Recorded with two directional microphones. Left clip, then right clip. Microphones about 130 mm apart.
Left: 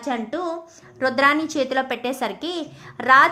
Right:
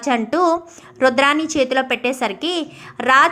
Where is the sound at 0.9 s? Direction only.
20° right (ahead or behind).